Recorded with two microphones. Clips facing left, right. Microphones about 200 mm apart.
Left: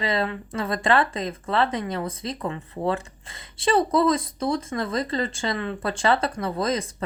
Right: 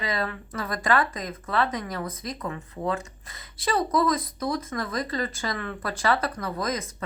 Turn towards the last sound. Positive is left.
turn(degrees=30)  # may be behind; listen again after turning